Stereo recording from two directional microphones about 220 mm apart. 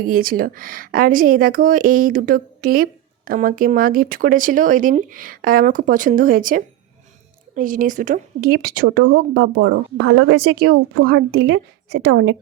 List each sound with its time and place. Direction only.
0.0 s speech: 40° right (ahead or behind)